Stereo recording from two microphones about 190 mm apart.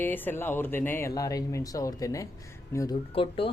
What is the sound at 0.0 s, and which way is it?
Speech, 10° left (ahead or behind).